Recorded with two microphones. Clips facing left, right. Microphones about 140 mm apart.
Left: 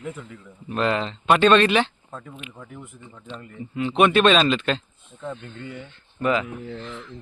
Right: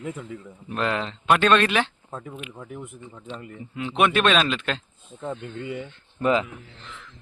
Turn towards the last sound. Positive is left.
turn(degrees=-30)  # may be behind; listen again after turning